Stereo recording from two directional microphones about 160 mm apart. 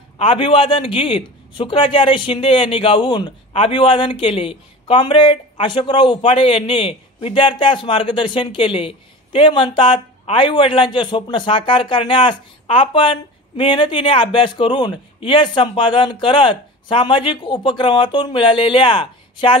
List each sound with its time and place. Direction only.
0.2 s a man's voice: 35° left (ahead or behind)